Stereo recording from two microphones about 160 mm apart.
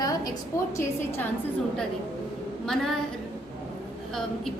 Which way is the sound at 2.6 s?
Centre (ahead or behind).